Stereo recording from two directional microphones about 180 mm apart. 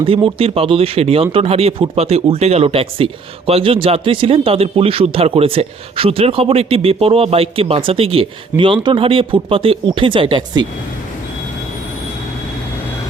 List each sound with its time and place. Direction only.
0.0 s speech: 30° right (ahead or behind)